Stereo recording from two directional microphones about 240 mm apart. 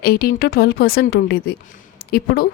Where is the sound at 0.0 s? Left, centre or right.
Left.